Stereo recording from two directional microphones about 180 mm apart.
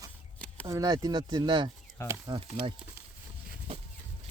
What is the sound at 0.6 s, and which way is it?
Speech, 20° right (ahead or behind).